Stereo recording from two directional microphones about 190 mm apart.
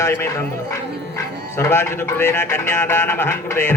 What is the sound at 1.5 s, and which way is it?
A man's voice, 15° left (ahead or behind).